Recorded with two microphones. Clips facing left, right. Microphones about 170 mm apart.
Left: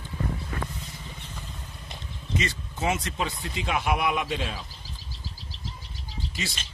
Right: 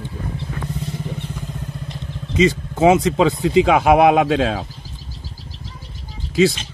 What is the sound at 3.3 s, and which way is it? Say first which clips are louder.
Speech: right 15 dB; 90° right.